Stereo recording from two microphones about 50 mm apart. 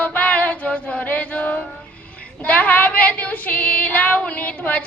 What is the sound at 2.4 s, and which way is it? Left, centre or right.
Female singing, left.